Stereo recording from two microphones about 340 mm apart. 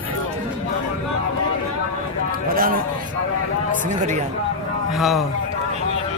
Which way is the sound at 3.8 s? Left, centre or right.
Right.